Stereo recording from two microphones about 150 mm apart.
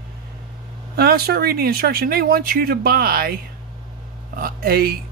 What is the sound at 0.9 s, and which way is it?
Speech, 90° right.